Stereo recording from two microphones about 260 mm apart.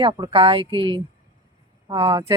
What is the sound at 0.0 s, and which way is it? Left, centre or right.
Speech, centre.